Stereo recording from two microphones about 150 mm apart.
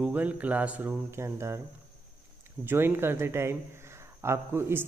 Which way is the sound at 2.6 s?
15° right (ahead or behind).